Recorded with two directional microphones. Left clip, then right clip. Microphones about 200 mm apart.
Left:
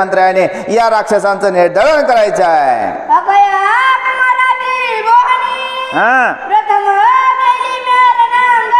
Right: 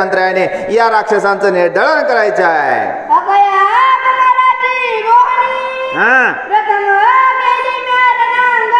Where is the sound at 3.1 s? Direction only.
10° left (ahead or behind).